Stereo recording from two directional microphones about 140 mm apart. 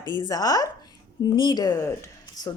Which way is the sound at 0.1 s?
30° left (ahead or behind).